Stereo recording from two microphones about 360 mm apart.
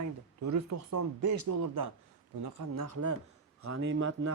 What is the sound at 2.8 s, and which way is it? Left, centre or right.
Speech, right.